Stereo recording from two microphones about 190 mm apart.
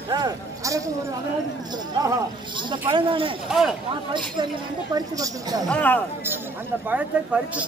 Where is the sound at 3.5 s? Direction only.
Centre (ahead or behind).